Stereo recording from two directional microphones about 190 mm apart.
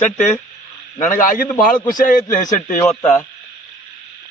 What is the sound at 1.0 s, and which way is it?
A man's voice, 40° left (ahead or behind).